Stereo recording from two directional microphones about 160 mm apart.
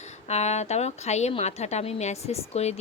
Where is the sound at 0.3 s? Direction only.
45° left (ahead or behind).